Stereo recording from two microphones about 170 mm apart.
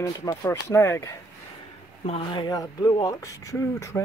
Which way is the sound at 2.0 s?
30° left (ahead or behind).